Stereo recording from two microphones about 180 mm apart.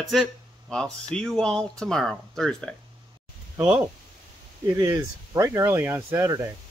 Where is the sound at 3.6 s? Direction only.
20° right (ahead or behind).